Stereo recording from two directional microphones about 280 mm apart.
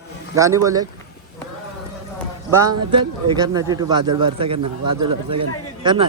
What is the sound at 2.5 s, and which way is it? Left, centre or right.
Speech, centre.